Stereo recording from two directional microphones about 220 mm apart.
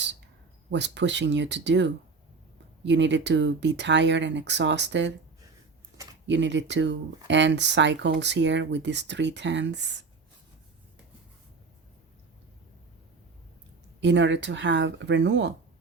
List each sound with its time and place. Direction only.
0.7 s speech: 55° right (ahead or behind)
6.2 s speech: 55° right (ahead or behind)
14.0 s speech: 55° right (ahead or behind)